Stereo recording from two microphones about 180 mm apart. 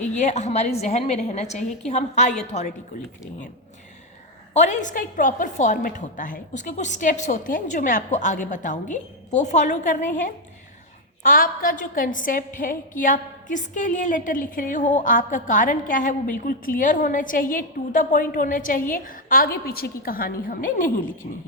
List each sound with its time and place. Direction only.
0.1 s a woman's voice: 40° left (ahead or behind)
4.5 s a woman's voice: 40° left (ahead or behind)